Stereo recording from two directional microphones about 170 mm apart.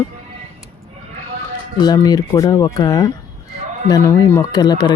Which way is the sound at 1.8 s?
25° left (ahead or behind).